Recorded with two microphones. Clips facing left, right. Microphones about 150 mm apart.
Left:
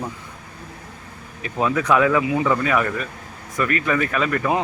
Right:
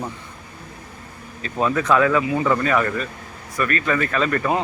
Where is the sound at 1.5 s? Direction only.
10° left (ahead or behind).